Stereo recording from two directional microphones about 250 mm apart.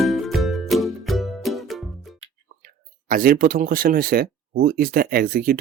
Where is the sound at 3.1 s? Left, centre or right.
Right.